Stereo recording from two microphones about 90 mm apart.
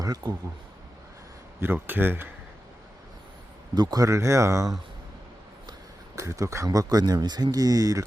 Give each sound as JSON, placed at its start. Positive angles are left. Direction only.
{"t": 0.0, "sound": "speech", "side_deg": -50}
{"t": 1.6, "sound": "speech", "side_deg": -25}
{"t": 3.8, "sound": "speech", "side_deg": -45}
{"t": 6.1, "sound": "speech", "side_deg": -35}
{"t": 6.7, "sound": "speech", "side_deg": -45}